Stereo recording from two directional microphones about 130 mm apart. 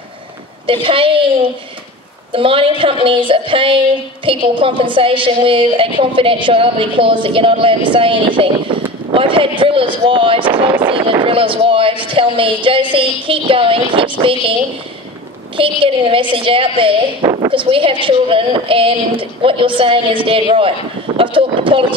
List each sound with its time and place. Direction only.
0.7 s a woman's voice: 45° right (ahead or behind)
15.5 s a woman's voice: 45° right (ahead or behind)